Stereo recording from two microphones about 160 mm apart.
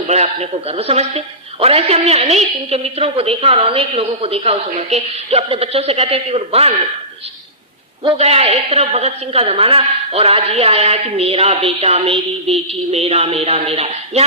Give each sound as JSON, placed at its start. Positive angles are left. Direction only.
{"t": 0.1, "sound": "a man's voice", "side_deg": -45}
{"t": 8.0, "sound": "a man's voice", "side_deg": -40}